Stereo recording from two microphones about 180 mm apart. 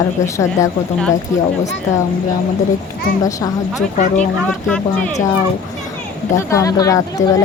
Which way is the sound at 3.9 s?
40° left (ahead or behind).